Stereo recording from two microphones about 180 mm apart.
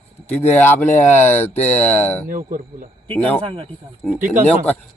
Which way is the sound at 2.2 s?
45° right (ahead or behind).